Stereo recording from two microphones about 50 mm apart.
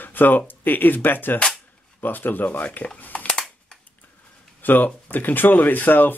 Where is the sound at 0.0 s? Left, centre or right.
Left.